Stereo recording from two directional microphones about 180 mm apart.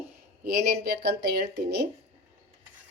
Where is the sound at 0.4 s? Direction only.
60° right (ahead or behind).